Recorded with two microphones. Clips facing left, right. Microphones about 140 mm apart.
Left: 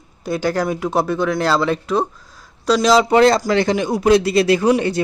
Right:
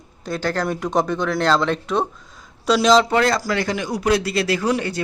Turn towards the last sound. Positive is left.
turn(degrees=20)  # may be behind; listen again after turning